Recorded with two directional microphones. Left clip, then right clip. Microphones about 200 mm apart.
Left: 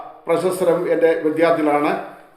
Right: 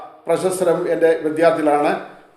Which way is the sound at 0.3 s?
20° right (ahead or behind).